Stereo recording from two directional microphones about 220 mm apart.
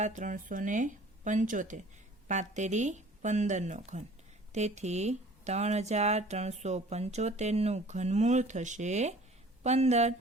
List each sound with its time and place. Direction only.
0.0 s speech: 35° right (ahead or behind)